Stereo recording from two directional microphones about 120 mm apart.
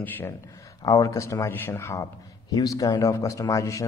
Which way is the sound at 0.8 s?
25° left (ahead or behind).